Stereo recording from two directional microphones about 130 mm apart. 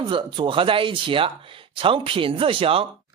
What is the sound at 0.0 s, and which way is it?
Speech, 40° right (ahead or behind).